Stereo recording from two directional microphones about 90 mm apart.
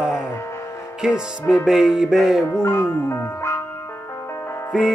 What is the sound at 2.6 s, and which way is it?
Speech, 25° left (ahead or behind).